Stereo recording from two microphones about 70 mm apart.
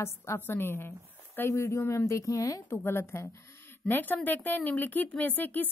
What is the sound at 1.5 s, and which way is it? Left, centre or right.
Speech, left.